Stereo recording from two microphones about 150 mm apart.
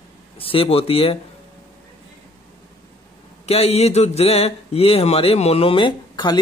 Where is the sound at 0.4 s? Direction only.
40° left (ahead or behind).